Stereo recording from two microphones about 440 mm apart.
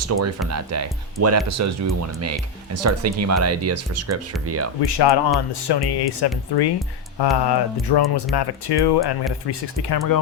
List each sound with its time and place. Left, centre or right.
0.0 s speech: right
4.9 s speech: left